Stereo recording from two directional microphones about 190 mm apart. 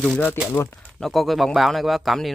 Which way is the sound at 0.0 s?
5° left (ahead or behind).